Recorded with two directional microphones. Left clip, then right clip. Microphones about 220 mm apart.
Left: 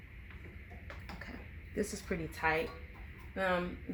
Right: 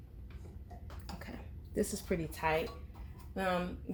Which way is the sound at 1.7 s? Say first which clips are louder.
Right 2 dB; 35° right (ahead or behind).